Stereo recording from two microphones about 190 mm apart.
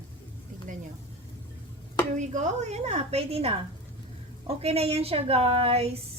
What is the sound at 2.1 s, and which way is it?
A woman's voice, 40° right (ahead or behind).